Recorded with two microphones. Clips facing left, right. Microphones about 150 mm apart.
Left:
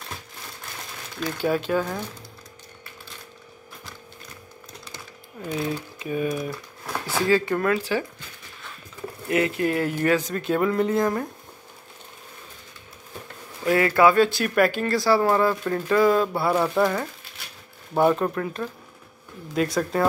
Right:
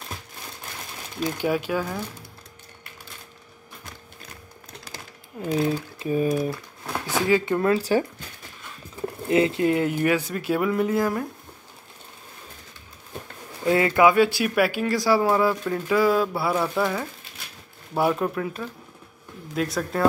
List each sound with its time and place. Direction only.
1.2 s speech: 15° right (ahead or behind)
5.4 s speech: 35° right (ahead or behind)
7.2 s speech: 15° right (ahead or behind)
9.3 s speech: 25° right (ahead or behind); by 11.2 s 5° right (ahead or behind)
13.7 s speech: 20° right (ahead or behind); by 20.1 s centre (ahead or behind)